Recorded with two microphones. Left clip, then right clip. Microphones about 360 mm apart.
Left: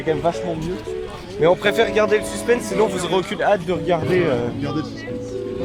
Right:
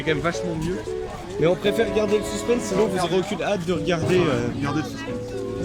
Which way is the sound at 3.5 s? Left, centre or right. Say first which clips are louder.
Left 8 dB; left.